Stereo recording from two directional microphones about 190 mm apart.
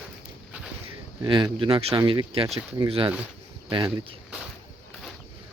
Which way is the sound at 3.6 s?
25° right (ahead or behind).